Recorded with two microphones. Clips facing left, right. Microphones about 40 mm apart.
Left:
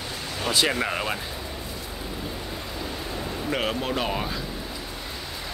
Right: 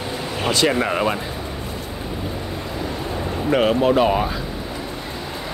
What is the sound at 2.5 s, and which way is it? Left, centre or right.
Vehicle, centre.